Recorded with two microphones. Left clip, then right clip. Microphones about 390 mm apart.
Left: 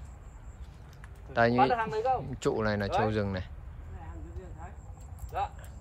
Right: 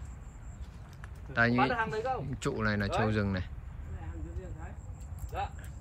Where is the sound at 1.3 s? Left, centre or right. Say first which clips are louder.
Left 3 dB; centre.